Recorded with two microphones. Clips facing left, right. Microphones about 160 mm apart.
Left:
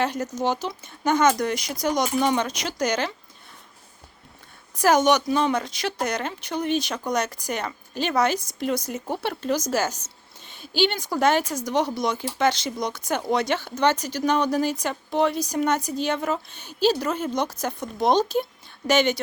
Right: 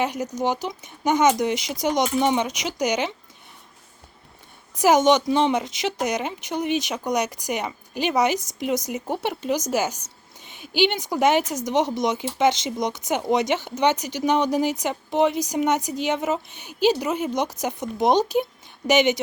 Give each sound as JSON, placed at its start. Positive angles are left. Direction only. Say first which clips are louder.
{"t": 0.0, "sound": "a woman's voice", "louder": "even", "side_deg": -15}
{"t": 4.8, "sound": "a woman's voice", "louder": "right 2 dB", "side_deg": -20}